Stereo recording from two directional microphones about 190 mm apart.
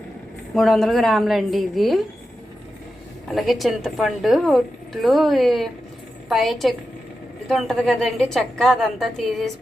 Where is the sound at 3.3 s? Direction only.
Centre (ahead or behind).